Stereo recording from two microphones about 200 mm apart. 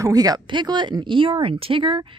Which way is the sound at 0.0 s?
20° right (ahead or behind).